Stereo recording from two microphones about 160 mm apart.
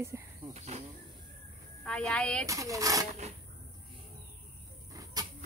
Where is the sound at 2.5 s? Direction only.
20° right (ahead or behind).